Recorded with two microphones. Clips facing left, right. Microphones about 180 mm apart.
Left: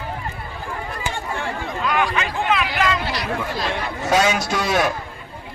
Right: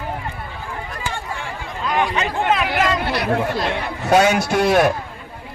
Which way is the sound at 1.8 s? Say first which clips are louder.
Right 2 dB; 25° right (ahead or behind).